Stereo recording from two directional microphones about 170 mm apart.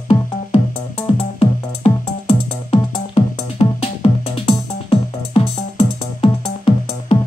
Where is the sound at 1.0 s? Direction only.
35° left (ahead or behind).